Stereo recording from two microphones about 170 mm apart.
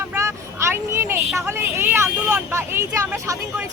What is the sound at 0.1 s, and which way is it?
Vehicle, 15° right (ahead or behind).